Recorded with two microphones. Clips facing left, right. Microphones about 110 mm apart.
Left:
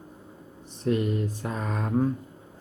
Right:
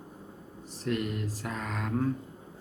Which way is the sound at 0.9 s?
25° left (ahead or behind).